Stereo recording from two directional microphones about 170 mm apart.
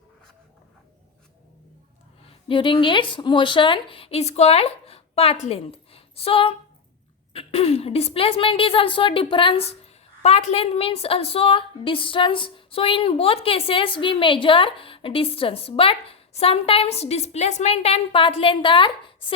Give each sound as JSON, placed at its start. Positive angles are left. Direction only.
{"t": 2.5, "sound": "a woman's voice", "side_deg": 30}